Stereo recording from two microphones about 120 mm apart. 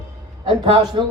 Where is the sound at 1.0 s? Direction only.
40° right (ahead or behind).